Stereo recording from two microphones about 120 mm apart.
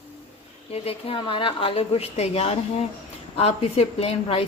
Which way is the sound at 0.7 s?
55° left (ahead or behind).